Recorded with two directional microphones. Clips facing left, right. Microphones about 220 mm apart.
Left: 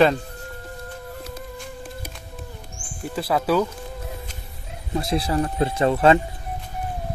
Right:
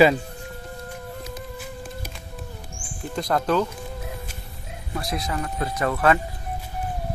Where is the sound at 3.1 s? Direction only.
5° left (ahead or behind).